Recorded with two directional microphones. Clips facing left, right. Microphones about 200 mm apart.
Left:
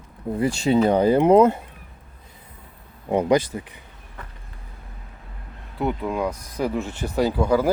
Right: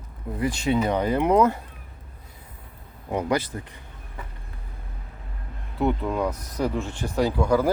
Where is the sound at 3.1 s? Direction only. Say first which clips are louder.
Left 6 dB; 20° left (ahead or behind).